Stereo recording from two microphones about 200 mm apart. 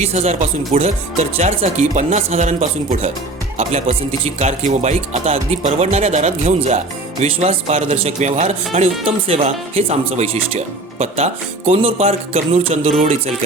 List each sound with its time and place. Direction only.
0.0 s speech: 30° right (ahead or behind)